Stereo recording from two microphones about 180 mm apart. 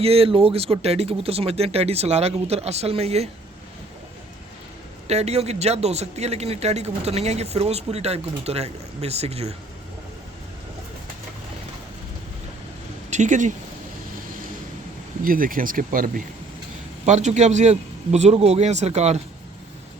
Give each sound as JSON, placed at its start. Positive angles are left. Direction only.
{"t": 0.0, "sound": "a man's voice", "side_deg": -35}
{"t": 5.0, "sound": "a man's voice", "side_deg": -35}
{"t": 13.1, "sound": "speech", "side_deg": -40}
{"t": 15.2, "sound": "a man's voice", "side_deg": -50}